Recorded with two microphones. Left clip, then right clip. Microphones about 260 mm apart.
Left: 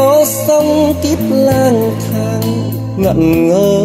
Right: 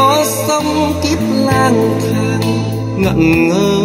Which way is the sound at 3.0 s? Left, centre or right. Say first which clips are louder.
Left 1 dB; right.